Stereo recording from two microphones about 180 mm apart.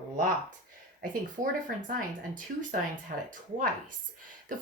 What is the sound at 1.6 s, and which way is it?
A woman's voice, 45° right (ahead or behind).